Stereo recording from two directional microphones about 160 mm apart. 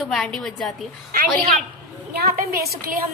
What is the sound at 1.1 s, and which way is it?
Speech, 60° right (ahead or behind).